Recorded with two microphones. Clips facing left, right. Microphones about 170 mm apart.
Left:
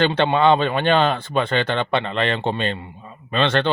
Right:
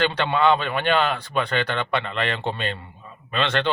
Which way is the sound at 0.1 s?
25° left (ahead or behind).